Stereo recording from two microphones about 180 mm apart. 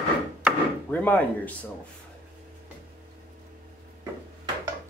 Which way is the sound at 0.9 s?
10° left (ahead or behind).